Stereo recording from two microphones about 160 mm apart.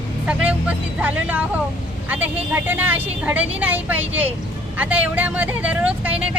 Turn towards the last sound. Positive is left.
turn(degrees=-10)  # may be behind; listen again after turning